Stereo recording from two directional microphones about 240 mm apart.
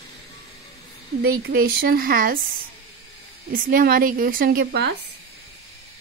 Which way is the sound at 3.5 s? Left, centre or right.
Right.